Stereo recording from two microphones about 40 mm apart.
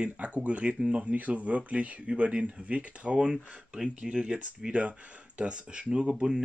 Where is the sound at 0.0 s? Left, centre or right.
Right.